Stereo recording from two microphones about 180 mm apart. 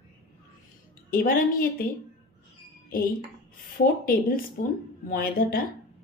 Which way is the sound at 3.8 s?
50° left (ahead or behind).